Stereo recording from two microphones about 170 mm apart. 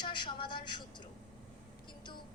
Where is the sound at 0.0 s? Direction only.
25° left (ahead or behind).